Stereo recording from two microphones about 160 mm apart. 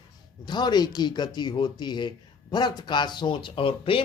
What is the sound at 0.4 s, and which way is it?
Speech, 25° left (ahead or behind).